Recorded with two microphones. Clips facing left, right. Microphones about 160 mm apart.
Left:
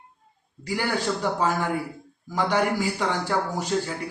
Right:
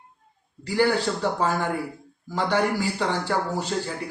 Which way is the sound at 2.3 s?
15° left (ahead or behind).